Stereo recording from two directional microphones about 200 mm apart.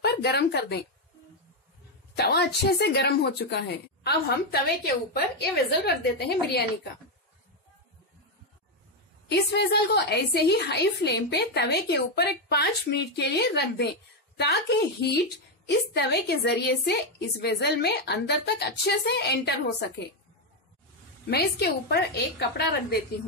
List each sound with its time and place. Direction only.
0.0 s speech: 55° left (ahead or behind)
2.1 s a woman's voice: 55° left (ahead or behind)
9.3 s a woman's voice: 55° left (ahead or behind)
21.3 s a woman's voice: 55° left (ahead or behind)